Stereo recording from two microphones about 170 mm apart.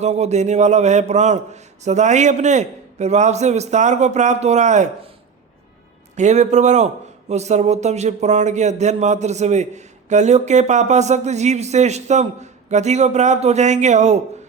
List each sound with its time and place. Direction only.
0.0 s speech: 40° right (ahead or behind)
6.1 s speech: 45° right (ahead or behind)